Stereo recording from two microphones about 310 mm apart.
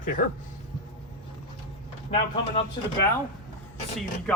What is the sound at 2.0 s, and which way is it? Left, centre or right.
Speech, centre.